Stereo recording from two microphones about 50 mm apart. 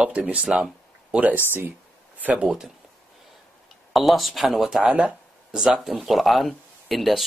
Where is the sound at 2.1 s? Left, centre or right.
Right.